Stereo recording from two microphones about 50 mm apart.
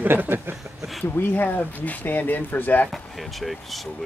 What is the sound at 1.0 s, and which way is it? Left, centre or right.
Speech, left.